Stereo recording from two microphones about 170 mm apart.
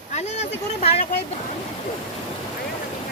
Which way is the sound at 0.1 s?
40° left (ahead or behind).